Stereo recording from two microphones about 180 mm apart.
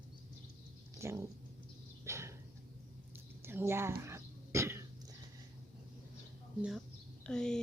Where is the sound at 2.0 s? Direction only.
15° right (ahead or behind).